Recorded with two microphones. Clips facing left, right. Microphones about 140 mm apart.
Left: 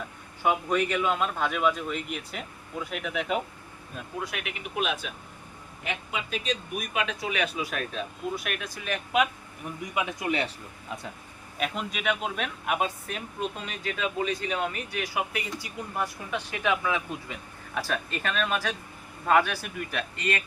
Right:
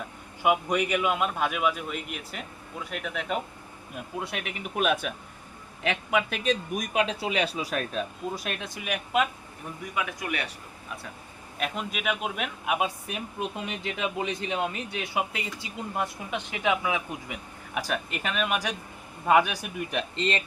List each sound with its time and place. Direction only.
0.4 s speech: 15° right (ahead or behind); by 3.4 s centre (ahead or behind)
4.2 s speech: 30° right (ahead or behind)
4.8 s speech: 50° right (ahead or behind)
5.8 s speech: 80° right; by 6.6 s 60° right (ahead or behind)
6.7 s speech: 35° right (ahead or behind)
8.4 s speech: 25° right (ahead or behind)
9.9 s speech: 20° left (ahead or behind)
11.5 s speech: centre (ahead or behind); by 20.4 s 25° right (ahead or behind)